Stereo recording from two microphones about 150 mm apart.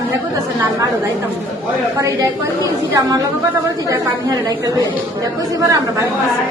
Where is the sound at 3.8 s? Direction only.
25° right (ahead or behind).